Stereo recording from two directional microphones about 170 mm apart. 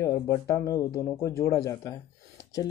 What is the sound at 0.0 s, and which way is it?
Speech, 20° left (ahead or behind).